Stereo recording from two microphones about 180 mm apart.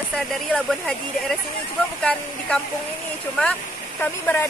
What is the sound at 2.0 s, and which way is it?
Speech, 5° left (ahead or behind).